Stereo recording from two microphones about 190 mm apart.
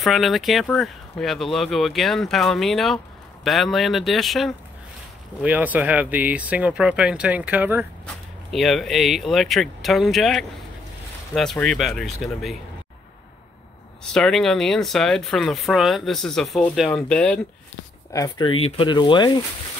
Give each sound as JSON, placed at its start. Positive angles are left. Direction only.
{"t": 0.0, "sound": "speech", "side_deg": 0}
{"t": 14.1, "sound": "speech", "side_deg": 0}
{"t": 18.1, "sound": "speech", "side_deg": 20}